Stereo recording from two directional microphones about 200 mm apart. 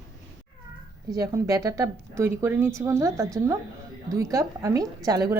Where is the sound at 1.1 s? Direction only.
15° right (ahead or behind).